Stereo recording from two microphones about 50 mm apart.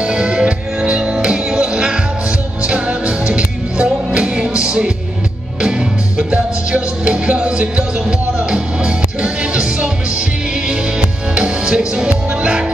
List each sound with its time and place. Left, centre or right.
0.0 s music: centre
11.3 s music: centre